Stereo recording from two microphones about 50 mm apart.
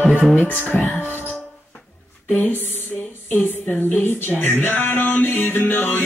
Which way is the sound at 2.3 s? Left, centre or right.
Left.